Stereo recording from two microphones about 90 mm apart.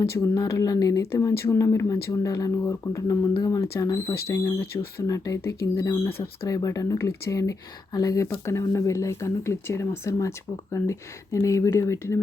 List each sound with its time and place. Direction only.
0.0 s speech: 30° left (ahead or behind)
6.5 s speech: 40° left (ahead or behind)